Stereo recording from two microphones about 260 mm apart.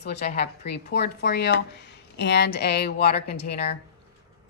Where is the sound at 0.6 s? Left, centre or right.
Left.